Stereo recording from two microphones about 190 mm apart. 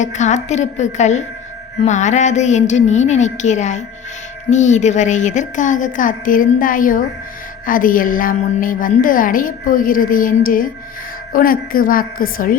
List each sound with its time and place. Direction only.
0.0 s a woman's voice: 40° left (ahead or behind)